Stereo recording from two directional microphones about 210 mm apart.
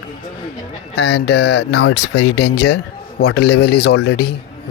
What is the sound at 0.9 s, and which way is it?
Speech, 50° left (ahead or behind).